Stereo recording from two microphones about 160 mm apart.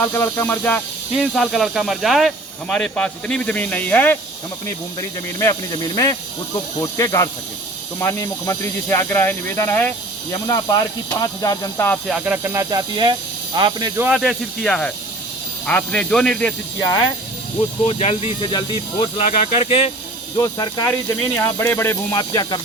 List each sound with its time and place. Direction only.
0.0 s speech: 15° left (ahead or behind)
1.1 s speech: centre (ahead or behind)
11.2 s speech: 20° left (ahead or behind)
12.0 s speech: 5° right (ahead or behind)
14.1 s speech: centre (ahead or behind)
16.8 s speech: 25° left (ahead or behind)
17.8 s speech: 40° left (ahead or behind)
19.2 s speech: 45° left (ahead or behind)
20.3 s speech: 25° left (ahead or behind)